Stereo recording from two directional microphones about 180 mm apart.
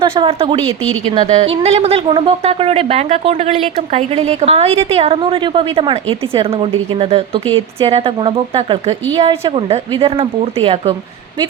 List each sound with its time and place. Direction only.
0.0 s speech: 25° right (ahead or behind)
0.8 s a woman's voice: 10° left (ahead or behind)
1.2 s a woman's voice: 40° right (ahead or behind)